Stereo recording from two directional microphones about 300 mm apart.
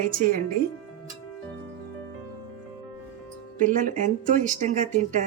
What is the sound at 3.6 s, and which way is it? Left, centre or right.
Speech, right.